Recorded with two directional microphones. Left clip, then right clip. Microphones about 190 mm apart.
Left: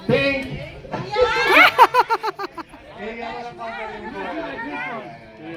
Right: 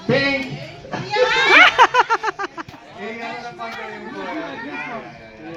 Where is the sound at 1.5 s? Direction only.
5° left (ahead or behind).